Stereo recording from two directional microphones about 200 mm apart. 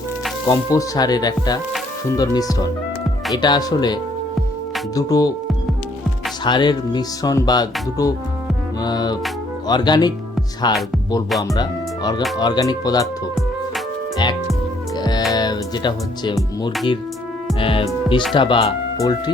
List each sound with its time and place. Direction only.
0.4 s music: 15° left (ahead or behind)
4.9 s speech: 15° left (ahead or behind)
6.4 s music: 20° left (ahead or behind)
11.5 s speech: 20° left (ahead or behind)
12.4 s music: 20° left (ahead or behind)
14.9 s music: 20° left (ahead or behind)
17.6 s music: 25° left (ahead or behind)